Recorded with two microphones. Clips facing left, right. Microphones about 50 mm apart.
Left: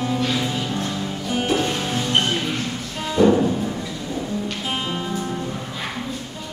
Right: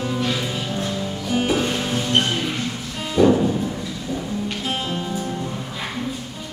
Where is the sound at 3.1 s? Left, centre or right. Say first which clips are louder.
Even; centre.